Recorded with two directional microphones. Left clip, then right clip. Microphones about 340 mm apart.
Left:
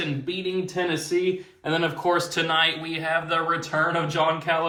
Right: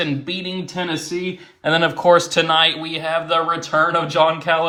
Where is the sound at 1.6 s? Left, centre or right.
Right.